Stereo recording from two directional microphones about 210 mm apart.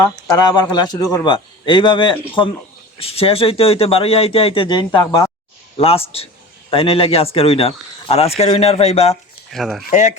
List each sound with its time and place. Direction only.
0.3 s speech: 20° left (ahead or behind)
5.7 s speech: 25° left (ahead or behind)
9.5 s speech: centre (ahead or behind)
9.9 s speech: 35° left (ahead or behind)